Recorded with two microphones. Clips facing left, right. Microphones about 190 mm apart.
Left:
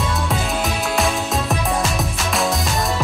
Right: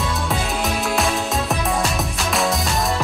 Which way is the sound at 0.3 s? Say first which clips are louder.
Even; centre (ahead or behind).